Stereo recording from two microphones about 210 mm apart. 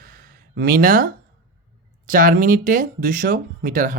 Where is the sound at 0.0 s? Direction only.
45° right (ahead or behind).